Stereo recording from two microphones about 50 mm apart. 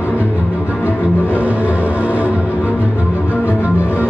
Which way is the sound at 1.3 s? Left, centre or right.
Right.